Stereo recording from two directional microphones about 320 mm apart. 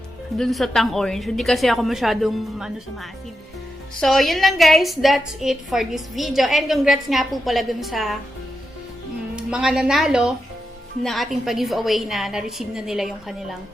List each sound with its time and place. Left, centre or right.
0.3 s a woman's voice: centre
9.3 s a woman's voice: centre